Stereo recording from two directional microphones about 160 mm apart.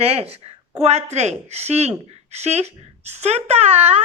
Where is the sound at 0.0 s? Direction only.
40° right (ahead or behind).